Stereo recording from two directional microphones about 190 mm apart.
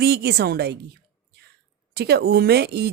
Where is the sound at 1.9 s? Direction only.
55° right (ahead or behind).